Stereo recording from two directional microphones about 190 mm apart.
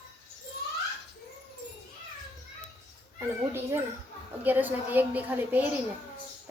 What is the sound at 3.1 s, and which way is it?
A woman's voice, 15° right (ahead or behind).